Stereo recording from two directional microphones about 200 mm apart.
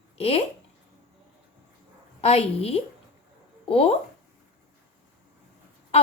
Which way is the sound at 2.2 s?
30° left (ahead or behind).